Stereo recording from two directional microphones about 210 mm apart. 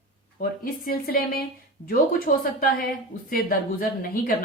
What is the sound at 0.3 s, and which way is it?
A woman's voice, 45° left (ahead or behind).